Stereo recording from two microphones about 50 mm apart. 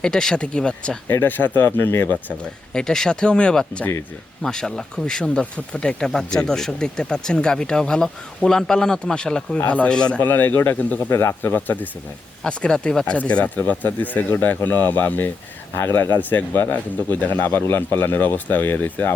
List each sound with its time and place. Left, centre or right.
0.0 s speech: centre
1.0 s speech: left
1.4 s speech: left
2.4 s speech: centre
6.1 s speech: centre
9.6 s speech: left
9.9 s speech: centre
10.2 s speech: left
10.8 s speech: left
11.4 s speech: left
12.5 s speech: centre
13.1 s speech: left
17.4 s speech: left